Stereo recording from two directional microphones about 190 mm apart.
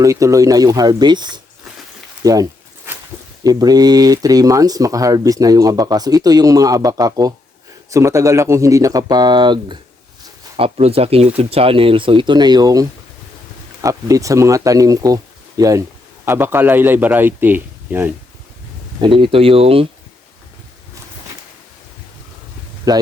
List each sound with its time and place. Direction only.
0.0 s speech: 15° right (ahead or behind)
2.2 s a sound: 20° right (ahead or behind)
3.4 s speech: 20° right (ahead or behind)
18.9 s speech: 25° right (ahead or behind)
22.9 s speech: 20° right (ahead or behind)